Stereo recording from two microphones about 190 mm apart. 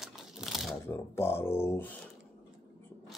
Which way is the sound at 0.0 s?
Centre (ahead or behind).